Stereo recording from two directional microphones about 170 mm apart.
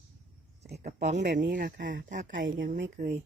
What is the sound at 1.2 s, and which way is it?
Speech, 90° right.